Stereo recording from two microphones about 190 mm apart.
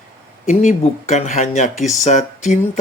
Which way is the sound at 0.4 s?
40° left (ahead or behind).